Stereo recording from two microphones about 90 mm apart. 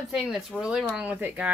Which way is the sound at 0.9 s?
15° right (ahead or behind).